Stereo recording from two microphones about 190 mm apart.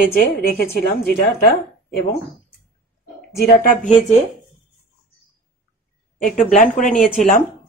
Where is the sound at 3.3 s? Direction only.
55° left (ahead or behind).